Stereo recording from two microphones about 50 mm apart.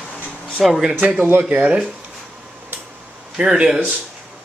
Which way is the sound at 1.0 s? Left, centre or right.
Right.